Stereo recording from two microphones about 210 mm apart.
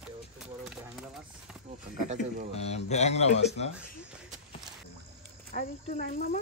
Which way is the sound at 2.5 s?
30° left (ahead or behind).